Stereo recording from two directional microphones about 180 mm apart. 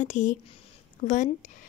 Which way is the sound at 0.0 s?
40° left (ahead or behind).